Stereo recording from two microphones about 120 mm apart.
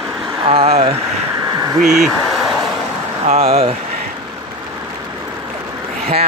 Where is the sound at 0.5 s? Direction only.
55° right (ahead or behind).